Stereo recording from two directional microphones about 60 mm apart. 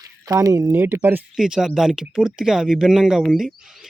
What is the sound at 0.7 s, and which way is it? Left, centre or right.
Speech, right.